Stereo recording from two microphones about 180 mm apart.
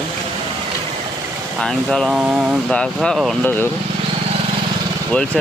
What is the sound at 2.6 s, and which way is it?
Speech, 5° left (ahead or behind).